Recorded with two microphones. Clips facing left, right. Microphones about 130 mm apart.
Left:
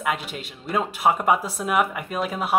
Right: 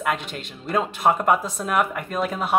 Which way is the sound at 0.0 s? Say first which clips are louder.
Right 1 dB; 5° left (ahead or behind).